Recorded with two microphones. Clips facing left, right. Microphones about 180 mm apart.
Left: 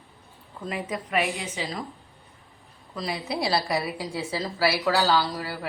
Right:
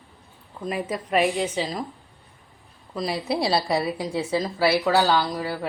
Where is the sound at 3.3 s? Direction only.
25° right (ahead or behind).